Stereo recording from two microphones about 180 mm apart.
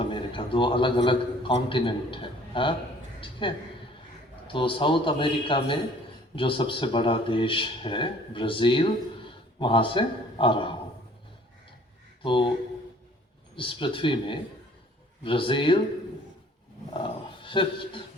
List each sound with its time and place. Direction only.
0.0 s a man's voice: 30° left (ahead or behind)
12.2 s speech: 30° left (ahead or behind)
13.6 s speech: 30° left (ahead or behind)
16.9 s dog: 30° left (ahead or behind)